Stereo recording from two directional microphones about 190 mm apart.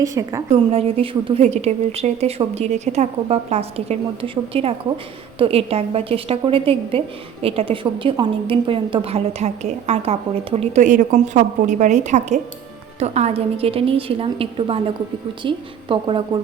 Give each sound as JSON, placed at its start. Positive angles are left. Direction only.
{"t": 0.0, "sound": "a woman's voice", "side_deg": -15}
{"t": 0.5, "sound": "a woman's voice", "side_deg": -30}